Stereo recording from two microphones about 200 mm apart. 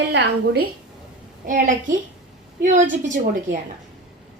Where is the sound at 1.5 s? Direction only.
40° right (ahead or behind).